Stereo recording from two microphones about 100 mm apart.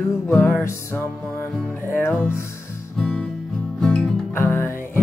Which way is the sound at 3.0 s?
10° left (ahead or behind).